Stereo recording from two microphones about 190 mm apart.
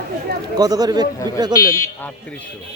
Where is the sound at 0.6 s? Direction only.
20° right (ahead or behind).